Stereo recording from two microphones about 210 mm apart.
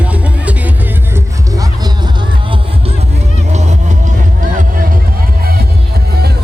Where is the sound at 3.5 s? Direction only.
35° right (ahead or behind).